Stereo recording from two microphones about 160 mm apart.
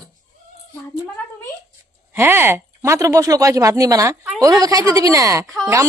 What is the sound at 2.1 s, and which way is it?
Speech, 15° right (ahead or behind).